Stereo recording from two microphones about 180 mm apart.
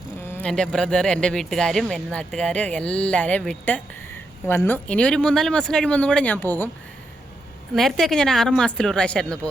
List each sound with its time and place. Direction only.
0.3 s speech: 10° left (ahead or behind)
7.8 s speech: centre (ahead or behind)